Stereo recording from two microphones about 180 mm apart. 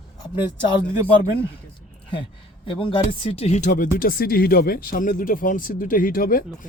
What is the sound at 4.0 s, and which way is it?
Speech, 55° left (ahead or behind).